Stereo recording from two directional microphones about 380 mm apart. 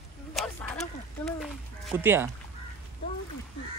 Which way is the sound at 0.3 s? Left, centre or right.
Centre.